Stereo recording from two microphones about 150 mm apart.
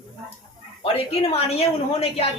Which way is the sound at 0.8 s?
40° left (ahead or behind).